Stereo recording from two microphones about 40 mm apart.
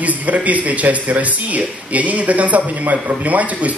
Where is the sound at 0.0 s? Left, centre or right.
Right.